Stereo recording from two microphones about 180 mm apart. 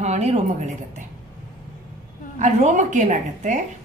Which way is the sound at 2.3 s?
40° right (ahead or behind).